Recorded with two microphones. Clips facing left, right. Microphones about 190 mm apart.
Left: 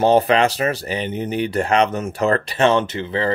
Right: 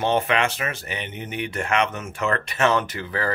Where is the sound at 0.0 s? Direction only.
35° left (ahead or behind).